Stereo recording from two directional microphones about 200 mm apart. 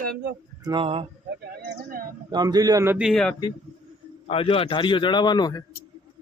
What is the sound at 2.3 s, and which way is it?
A man's voice, 20° right (ahead or behind).